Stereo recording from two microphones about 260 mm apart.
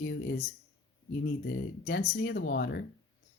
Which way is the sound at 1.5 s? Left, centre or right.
Left.